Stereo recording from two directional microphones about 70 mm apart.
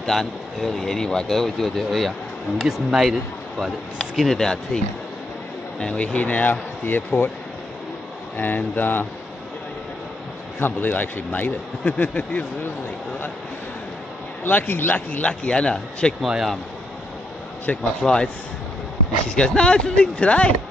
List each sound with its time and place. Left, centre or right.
0.0 s a man's voice: centre; by 7.2 s left
8.4 s a man's voice: left
10.6 s a man's voice: left
14.4 s a man's voice: left; by 16.2 s centre
16.3 s speech: centre
17.8 s speech: centre
19.3 s speech: centre